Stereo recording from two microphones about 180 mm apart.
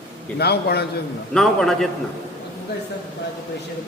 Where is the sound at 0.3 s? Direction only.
65° left (ahead or behind).